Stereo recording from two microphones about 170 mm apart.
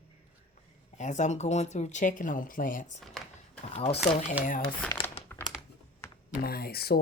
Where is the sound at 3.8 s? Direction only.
35° left (ahead or behind).